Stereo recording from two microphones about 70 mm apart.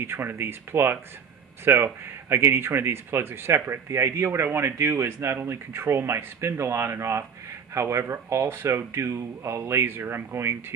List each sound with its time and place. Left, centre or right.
0.0 s speech: right